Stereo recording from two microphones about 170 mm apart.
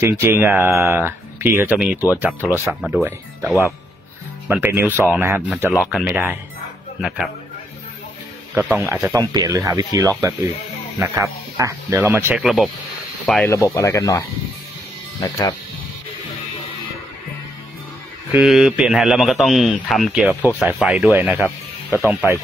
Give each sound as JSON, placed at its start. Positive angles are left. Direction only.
{"t": 0.0, "sound": "a man's voice", "side_deg": -15}
{"t": 4.5, "sound": "a man's voice", "side_deg": -10}
{"t": 8.7, "sound": "speech", "side_deg": -15}
{"t": 12.4, "sound": "a man's voice", "side_deg": 0}
{"t": 13.2, "sound": "speech", "side_deg": 10}
{"t": 18.3, "sound": "a man's voice", "side_deg": -5}